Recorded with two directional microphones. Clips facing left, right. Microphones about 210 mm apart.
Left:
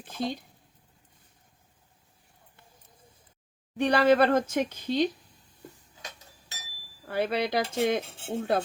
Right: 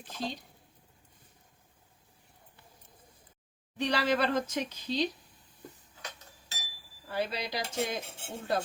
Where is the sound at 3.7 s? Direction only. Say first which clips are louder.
Left 8 dB; 55° left (ahead or behind).